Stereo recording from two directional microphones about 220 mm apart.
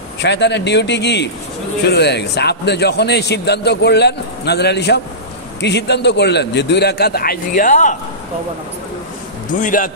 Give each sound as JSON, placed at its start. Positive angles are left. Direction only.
{"t": 0.2, "sound": "a man's voice", "side_deg": 50}
{"t": 9.6, "sound": "speech", "side_deg": 35}